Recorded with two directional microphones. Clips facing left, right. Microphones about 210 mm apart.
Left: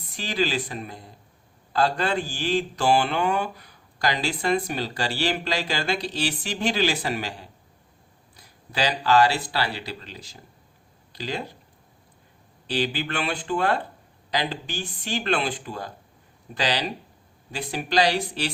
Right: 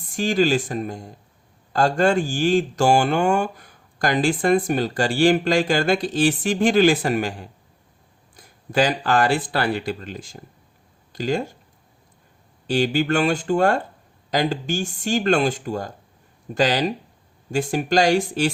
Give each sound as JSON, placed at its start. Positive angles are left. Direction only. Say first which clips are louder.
{"t": 0.0, "sound": "speech", "louder": "right 7 dB", "side_deg": -45}
{"t": 12.6, "sound": "speech", "louder": "right 7 dB", "side_deg": -45}